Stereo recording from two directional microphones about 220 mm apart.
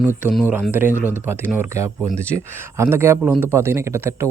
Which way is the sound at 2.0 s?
5° left (ahead or behind).